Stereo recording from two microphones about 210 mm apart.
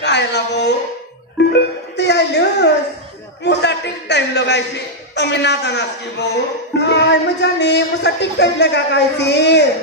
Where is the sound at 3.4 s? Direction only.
55° left (ahead or behind).